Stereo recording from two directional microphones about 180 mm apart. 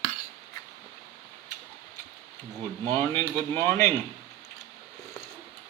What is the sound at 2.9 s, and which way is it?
Speech, 15° left (ahead or behind).